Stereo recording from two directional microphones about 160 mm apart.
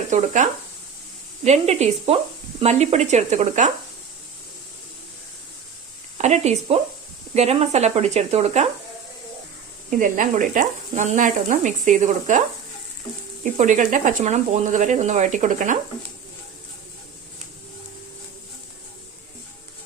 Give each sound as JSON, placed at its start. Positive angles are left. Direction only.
{"t": 0.1, "sound": "speech", "side_deg": -50}
{"t": 1.5, "sound": "speech", "side_deg": -40}
{"t": 6.1, "sound": "speech", "side_deg": -45}
{"t": 10.0, "sound": "speech", "side_deg": -55}
{"t": 13.4, "sound": "speech", "side_deg": -55}